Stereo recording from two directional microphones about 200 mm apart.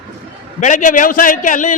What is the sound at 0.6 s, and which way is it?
A man's voice, 40° left (ahead or behind).